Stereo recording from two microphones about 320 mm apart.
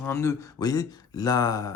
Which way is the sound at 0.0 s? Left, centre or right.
Centre.